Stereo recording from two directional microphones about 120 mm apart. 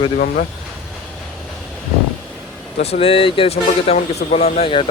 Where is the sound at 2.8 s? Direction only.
55° left (ahead or behind).